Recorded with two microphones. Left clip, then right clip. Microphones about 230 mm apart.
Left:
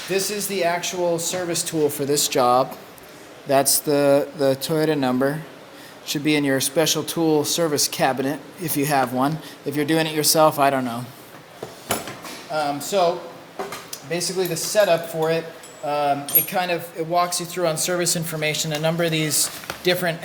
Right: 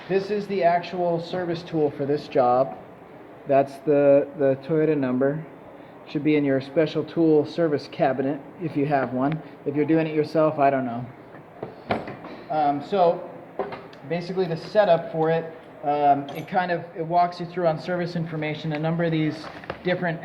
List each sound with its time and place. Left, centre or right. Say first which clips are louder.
0.1 s speech: even; left
12.5 s speech: right 1 dB; left
14.1 s speech: left 2 dB; left